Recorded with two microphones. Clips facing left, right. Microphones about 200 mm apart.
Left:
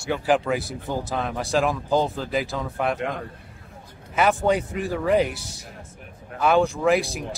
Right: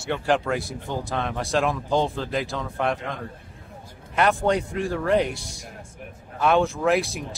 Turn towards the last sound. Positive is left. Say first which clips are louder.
# left 1 dB
turn(degrees=0)  # may be behind; listen again after turning